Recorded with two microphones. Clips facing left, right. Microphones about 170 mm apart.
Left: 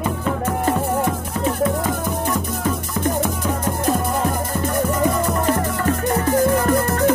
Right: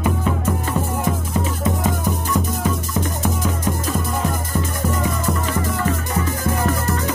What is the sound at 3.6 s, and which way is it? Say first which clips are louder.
Music: left 3 dB; 60° left (ahead or behind).